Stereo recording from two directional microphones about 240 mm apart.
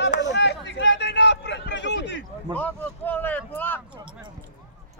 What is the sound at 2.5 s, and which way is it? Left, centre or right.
Speech, centre.